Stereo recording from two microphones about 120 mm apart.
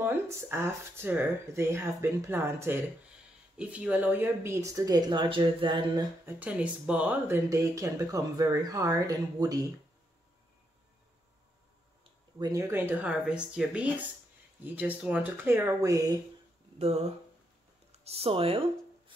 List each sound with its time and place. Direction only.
0.0 s speech: 20° right (ahead or behind); by 6.0 s 40° right (ahead or behind)
6.2 s speech: 10° right (ahead or behind); by 9.7 s 30° right (ahead or behind)
12.0 s speech: 35° right (ahead or behind)
16.7 s speech: 60° right (ahead or behind)